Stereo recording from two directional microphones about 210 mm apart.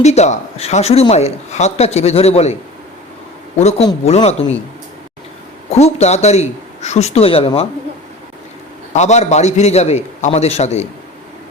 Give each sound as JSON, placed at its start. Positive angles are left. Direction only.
{"t": 0.0, "sound": "speech", "side_deg": 30}
{"t": 3.6, "sound": "speech", "side_deg": 30}
{"t": 5.7, "sound": "speech", "side_deg": 30}
{"t": 8.9, "sound": "speech", "side_deg": 35}